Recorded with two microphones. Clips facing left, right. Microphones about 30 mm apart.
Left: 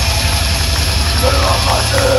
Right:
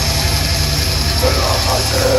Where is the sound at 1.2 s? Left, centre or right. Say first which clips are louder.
Left 2 dB; centre.